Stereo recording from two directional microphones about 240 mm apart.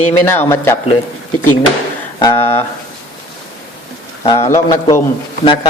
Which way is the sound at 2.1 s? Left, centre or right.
Centre.